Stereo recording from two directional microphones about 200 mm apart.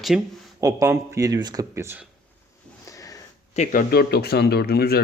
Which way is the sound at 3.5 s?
40° left (ahead or behind).